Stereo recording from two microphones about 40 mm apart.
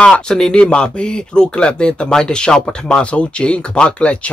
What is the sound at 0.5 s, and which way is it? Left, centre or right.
Speech, left.